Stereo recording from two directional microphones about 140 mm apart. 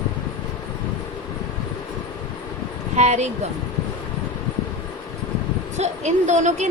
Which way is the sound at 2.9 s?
55° right (ahead or behind).